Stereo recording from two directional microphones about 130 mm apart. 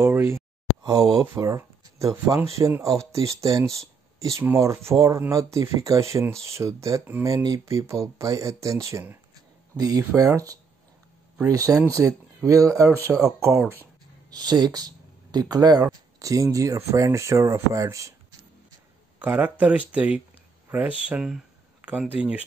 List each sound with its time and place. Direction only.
0.0 s speech: 20° right (ahead or behind)
14.3 s speech: 30° right (ahead or behind)
19.1 s speech: 15° right (ahead or behind)
20.6 s a sound: 15° right (ahead or behind)
21.0 s speech: 5° right (ahead or behind)